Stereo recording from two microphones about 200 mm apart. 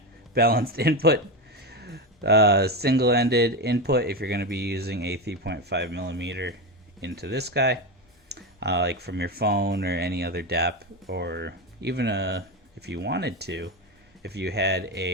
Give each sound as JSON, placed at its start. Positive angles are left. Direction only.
{"t": 0.3, "sound": "speech", "side_deg": -50}